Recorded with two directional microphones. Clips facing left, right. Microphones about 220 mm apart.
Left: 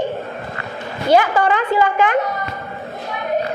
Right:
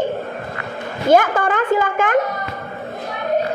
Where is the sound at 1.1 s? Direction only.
50° right (ahead or behind).